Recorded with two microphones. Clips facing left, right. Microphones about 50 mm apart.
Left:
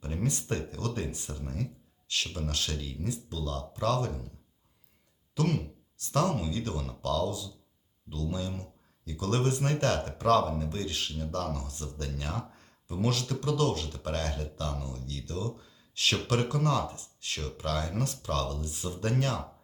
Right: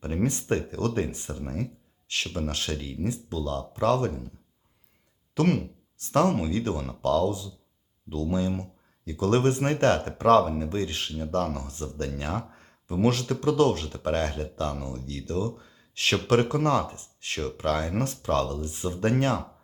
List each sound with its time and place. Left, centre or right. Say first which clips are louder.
0.0 s speech: right 6 dB; right
5.3 s speech: right 6 dB; right